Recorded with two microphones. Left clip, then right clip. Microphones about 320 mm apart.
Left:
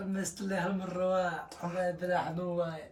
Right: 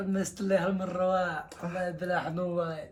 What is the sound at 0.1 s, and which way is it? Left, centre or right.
A man's voice, centre.